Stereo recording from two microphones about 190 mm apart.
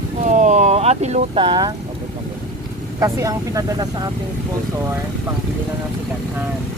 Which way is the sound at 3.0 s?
15° right (ahead or behind).